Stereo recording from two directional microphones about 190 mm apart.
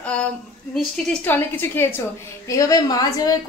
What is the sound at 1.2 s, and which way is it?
A woman's voice, 10° left (ahead or behind).